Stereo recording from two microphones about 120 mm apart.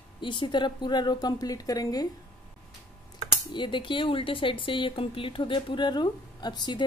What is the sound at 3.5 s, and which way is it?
Speech, 40° left (ahead or behind).